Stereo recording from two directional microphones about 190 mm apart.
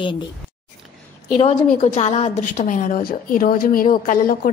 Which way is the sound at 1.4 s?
30° left (ahead or behind).